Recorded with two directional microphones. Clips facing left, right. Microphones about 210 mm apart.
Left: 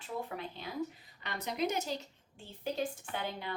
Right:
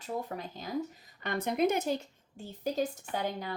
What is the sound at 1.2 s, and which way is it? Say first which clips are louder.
A woman's voice: right 6 dB; 50° right (ahead or behind).